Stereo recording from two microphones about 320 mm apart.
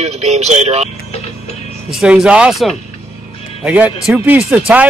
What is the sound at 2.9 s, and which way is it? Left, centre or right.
Music, centre.